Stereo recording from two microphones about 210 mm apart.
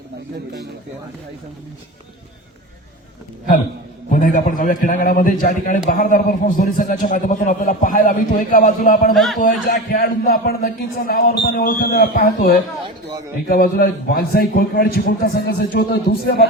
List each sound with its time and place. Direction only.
4.1 s a man's voice: 40° left (ahead or behind)
9.1 s speech: centre (ahead or behind)
9.4 s a man's voice: 45° left (ahead or behind)